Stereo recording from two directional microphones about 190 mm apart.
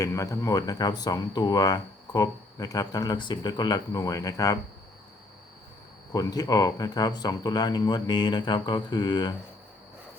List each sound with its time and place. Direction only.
0.0 s speech: 15° left (ahead or behind)
6.1 s speech: 20° left (ahead or behind)